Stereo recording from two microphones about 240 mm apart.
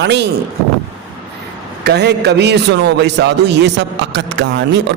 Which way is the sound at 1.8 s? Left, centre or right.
Right.